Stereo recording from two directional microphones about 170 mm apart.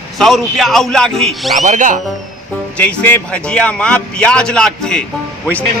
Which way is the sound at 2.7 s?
10° left (ahead or behind).